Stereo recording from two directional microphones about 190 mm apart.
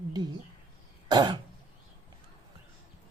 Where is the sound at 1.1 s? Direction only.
25° right (ahead or behind).